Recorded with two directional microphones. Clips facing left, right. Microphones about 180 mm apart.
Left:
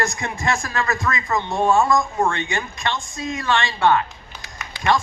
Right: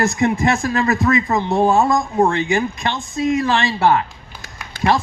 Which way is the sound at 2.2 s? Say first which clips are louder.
Right 6 dB; 35° right (ahead or behind).